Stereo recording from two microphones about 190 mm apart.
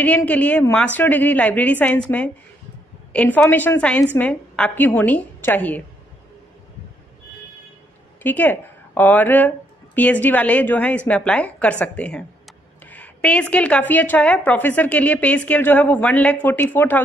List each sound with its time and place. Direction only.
0.0 s a woman's voice: 10° left (ahead or behind)
8.2 s a woman's voice: 10° left (ahead or behind)